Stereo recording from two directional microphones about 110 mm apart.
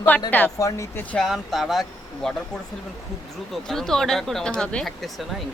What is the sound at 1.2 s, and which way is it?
A woman's voice, centre (ahead or behind).